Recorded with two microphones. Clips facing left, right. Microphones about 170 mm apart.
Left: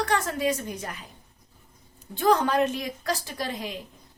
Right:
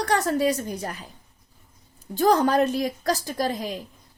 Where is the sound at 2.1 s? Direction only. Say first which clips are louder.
Right 3 dB; 40° right (ahead or behind).